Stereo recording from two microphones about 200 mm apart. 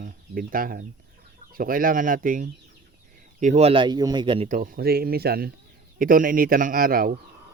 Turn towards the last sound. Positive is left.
turn(degrees=-45)  # may be behind; listen again after turning